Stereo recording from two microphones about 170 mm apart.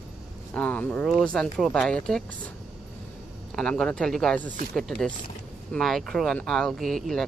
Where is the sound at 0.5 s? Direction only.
5° left (ahead or behind).